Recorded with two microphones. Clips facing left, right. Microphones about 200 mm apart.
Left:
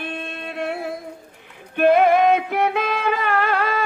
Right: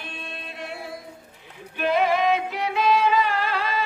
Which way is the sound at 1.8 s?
55° left (ahead or behind).